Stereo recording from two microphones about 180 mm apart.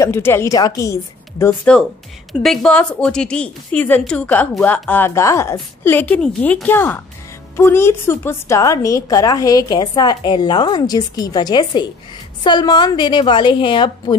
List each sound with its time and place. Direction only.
0.0 s a woman's voice: 15° left (ahead or behind)
1.5 s a woman's voice: 5° left (ahead or behind); by 14.1 s 25° left (ahead or behind)